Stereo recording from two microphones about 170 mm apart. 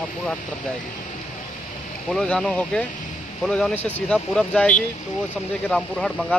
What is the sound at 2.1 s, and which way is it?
Speech, 5° left (ahead or behind).